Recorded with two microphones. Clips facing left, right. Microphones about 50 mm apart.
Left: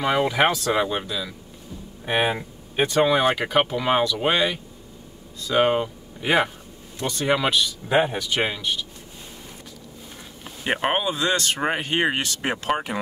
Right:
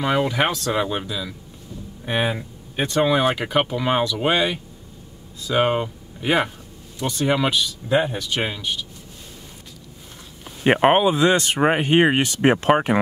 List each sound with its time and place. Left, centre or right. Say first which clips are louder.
0.2 s speech: left 1 dB; centre
2.0 s speech: left 1 dB; centre
2.9 s speech: right 1 dB; centre
7.9 s speech: even; left
8.2 s speech: left 1 dB; centre
10.6 s speech: right 8 dB; right